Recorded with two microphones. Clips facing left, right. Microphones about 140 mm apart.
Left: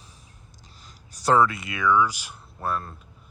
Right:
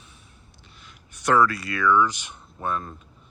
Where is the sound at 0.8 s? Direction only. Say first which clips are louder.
Left 1 dB; 35° left (ahead or behind).